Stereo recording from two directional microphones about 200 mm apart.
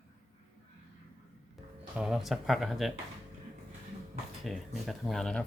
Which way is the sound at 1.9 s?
Centre (ahead or behind).